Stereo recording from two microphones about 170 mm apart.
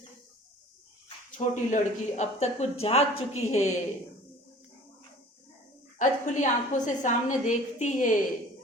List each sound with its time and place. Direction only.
1.4 s a woman's voice: 40° left (ahead or behind)
6.0 s a woman's voice: 45° left (ahead or behind)